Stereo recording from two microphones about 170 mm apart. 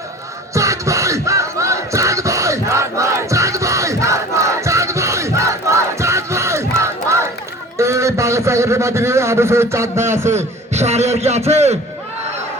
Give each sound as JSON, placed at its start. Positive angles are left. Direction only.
{"t": 0.5, "sound": "crowd", "side_deg": -20}
{"t": 7.8, "sound": "a man's voice", "side_deg": -15}
{"t": 10.3, "sound": "a man's voice", "side_deg": -40}